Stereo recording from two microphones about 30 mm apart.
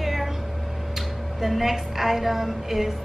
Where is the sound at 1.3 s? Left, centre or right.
Centre.